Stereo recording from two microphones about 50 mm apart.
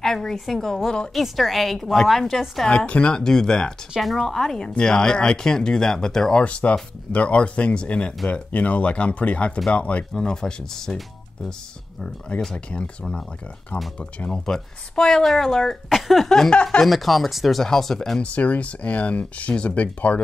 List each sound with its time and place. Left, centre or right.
0.0 s speech: centre
2.9 s speech: centre
4.0 s speech: centre
4.6 s speech: centre
6.4 s speech: left
12.5 s speech: left
13.9 s speech: left
14.4 s speech: centre
16.3 s speech: centre
17.6 s speech: centre
18.2 s speech: left